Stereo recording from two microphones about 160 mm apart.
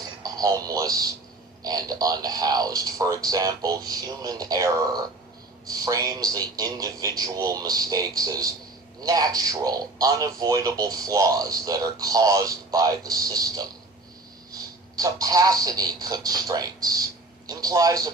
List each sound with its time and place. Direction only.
0.2 s a man's voice: 20° right (ahead or behind)